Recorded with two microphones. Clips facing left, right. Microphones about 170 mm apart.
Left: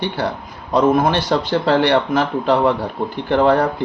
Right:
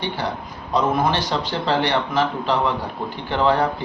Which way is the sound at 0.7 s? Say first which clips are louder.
Left 5 dB; 50° left (ahead or behind).